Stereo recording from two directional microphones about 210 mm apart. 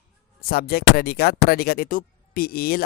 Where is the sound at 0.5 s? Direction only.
45° left (ahead or behind).